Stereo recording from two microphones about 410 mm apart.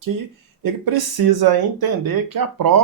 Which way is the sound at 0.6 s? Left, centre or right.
Right.